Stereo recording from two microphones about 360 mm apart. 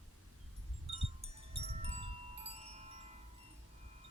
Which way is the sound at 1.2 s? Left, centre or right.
Centre.